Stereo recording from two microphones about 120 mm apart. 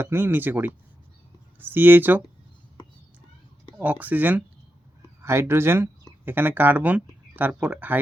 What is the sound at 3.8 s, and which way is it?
Speech, 15° right (ahead or behind).